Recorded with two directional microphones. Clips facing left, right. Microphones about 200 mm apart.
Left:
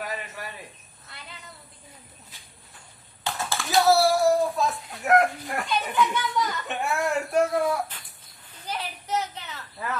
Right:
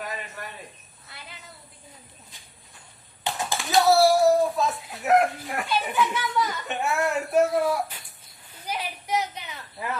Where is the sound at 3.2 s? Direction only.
15° right (ahead or behind).